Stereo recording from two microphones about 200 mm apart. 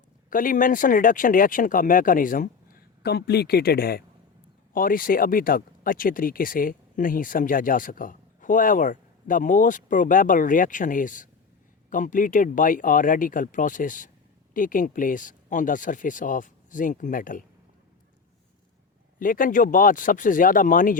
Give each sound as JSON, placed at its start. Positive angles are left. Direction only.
{"t": 0.3, "sound": "speech", "side_deg": 45}
{"t": 19.2, "sound": "speech", "side_deg": 45}